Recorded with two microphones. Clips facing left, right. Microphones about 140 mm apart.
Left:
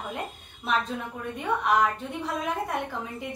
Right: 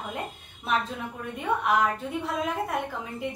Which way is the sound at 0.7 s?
Centre (ahead or behind).